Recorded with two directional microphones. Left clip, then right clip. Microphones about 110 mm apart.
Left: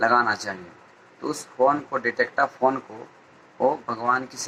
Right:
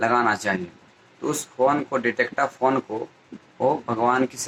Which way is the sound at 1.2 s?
20° right (ahead or behind).